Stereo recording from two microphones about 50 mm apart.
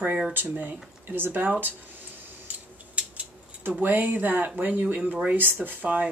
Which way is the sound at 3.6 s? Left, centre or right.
Right.